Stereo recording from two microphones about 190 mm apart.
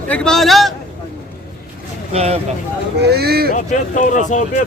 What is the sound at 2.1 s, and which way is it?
Music, 35° right (ahead or behind).